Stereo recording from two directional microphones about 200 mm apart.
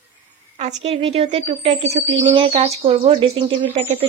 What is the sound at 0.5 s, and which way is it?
A woman's voice, 30° right (ahead or behind).